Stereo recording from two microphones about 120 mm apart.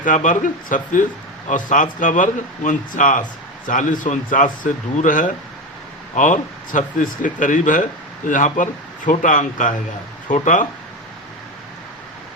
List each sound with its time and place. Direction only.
0.0 s speech: 90° left